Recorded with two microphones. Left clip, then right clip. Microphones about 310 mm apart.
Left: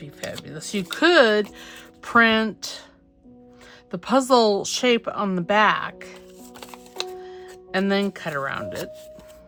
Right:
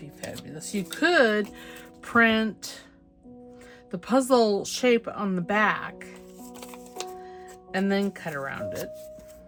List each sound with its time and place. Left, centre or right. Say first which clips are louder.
0.4 s speech: left 5 dB; centre
3.9 s speech: left 4 dB; centre
6.6 s music: left 5 dB; centre
7.3 s music: left 3 dB; right
7.7 s speech: left 4 dB; centre